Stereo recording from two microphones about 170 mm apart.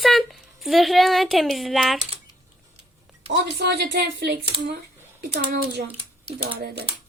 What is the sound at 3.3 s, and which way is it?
Speech, 80° right.